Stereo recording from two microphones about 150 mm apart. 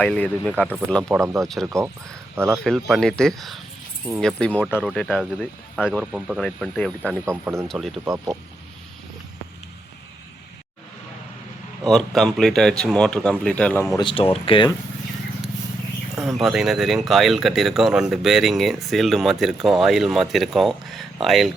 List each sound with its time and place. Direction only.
0.0 s speech: 10° left (ahead or behind)
1.2 s speech: 20° right (ahead or behind)
2.6 s speech: centre (ahead or behind)
6.4 s speech: 5° left (ahead or behind)
7.3 s speech: 15° right (ahead or behind)
7.7 s speech: centre (ahead or behind)
8.0 s speech: 25° right (ahead or behind)
11.8 s speech: centre (ahead or behind)
14.0 s speech: 35° left (ahead or behind)
16.2 s speech: centre (ahead or behind)